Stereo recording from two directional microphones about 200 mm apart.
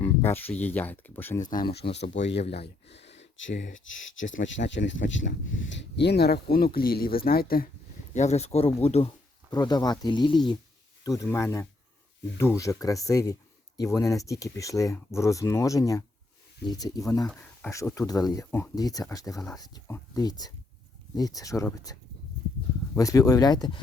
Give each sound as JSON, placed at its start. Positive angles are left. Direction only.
{"t": 0.0, "sound": "a sound", "side_deg": 10}
{"t": 0.6, "sound": "speech", "side_deg": 10}
{"t": 1.5, "sound": "speech", "side_deg": 45}
{"t": 2.4, "sound": "speech", "side_deg": 30}
{"t": 3.2, "sound": "a sound", "side_deg": 65}
{"t": 4.1, "sound": "speech", "side_deg": 70}
{"t": 8.1, "sound": "speech", "side_deg": 35}
{"t": 23.0, "sound": "speech", "side_deg": 15}